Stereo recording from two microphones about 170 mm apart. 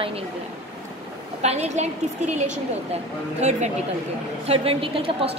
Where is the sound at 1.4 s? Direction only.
40° right (ahead or behind).